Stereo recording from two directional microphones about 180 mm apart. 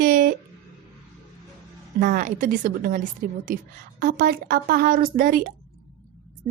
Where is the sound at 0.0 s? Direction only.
50° right (ahead or behind).